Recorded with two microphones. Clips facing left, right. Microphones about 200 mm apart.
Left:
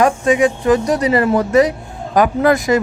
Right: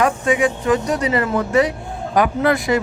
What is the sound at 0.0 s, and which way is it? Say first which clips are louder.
Speech: left 4 dB; 35° left (ahead or behind).